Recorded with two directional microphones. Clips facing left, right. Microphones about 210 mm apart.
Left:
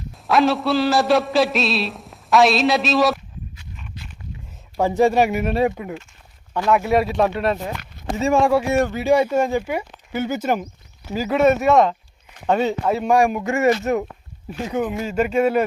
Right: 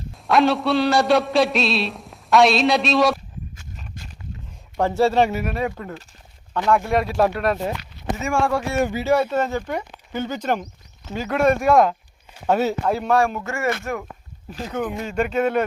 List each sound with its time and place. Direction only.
0.3 s a man's voice: centre (ahead or behind)
3.6 s a sound: 45° right (ahead or behind)
4.8 s speech: 15° left (ahead or behind)
5.4 s speech: 25° left (ahead or behind)
5.7 s a man's voice: 10° left (ahead or behind)
8.3 s a man's voice: 15° left (ahead or behind); by 13.1 s centre (ahead or behind)
13.1 s speech: 15° left (ahead or behind)
14.7 s speech: 5° left (ahead or behind)